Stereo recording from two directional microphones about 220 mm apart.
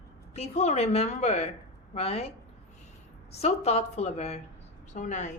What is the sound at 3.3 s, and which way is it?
A woman's voice, 30° left (ahead or behind).